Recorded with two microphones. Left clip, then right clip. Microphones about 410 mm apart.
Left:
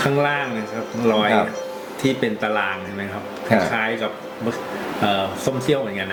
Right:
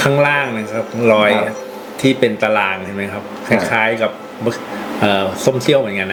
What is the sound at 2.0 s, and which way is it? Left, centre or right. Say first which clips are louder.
Speech: right 7 dB; right.